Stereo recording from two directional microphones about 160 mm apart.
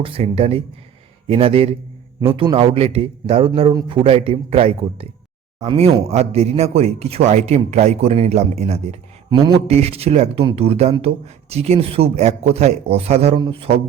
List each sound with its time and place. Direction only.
0.0 s a man's voice: 35° right (ahead or behind)
9.3 s a man's voice: 25° right (ahead or behind)
9.6 s a man's voice: 40° right (ahead or behind)